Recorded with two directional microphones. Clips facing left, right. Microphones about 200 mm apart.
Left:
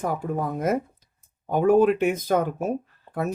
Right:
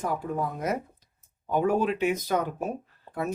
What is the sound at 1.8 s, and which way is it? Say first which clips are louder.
Speech: left 6 dB; 50° left (ahead or behind).